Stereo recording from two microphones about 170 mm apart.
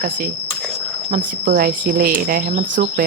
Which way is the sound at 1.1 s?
55° right (ahead or behind).